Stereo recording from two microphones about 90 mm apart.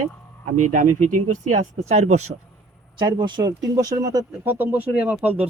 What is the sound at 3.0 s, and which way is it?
Speech, 60° right (ahead or behind).